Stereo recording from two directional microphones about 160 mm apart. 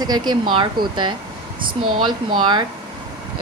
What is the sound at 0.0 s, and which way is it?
Speech, 25° right (ahead or behind).